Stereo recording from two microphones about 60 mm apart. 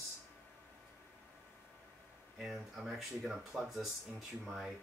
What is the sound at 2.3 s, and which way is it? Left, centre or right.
Speech, centre.